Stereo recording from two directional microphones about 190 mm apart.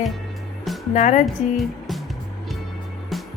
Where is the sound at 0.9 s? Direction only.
40° left (ahead or behind).